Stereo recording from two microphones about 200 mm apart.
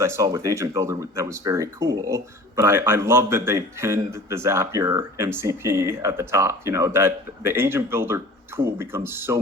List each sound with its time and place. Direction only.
0.0 s speech: 15° right (ahead or behind)